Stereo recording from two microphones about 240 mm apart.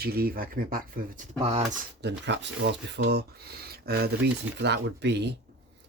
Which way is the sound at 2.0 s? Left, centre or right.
Right.